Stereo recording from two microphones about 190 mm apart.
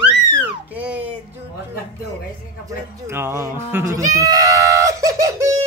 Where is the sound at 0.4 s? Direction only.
10° right (ahead or behind).